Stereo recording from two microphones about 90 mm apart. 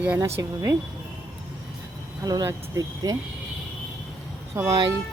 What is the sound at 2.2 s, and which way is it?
Speech, 45° right (ahead or behind).